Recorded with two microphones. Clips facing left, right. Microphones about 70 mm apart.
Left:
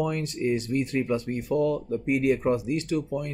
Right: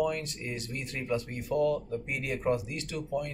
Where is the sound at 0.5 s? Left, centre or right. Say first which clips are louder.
Left 12 dB; left.